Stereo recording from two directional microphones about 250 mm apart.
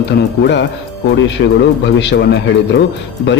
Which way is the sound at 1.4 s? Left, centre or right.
Left.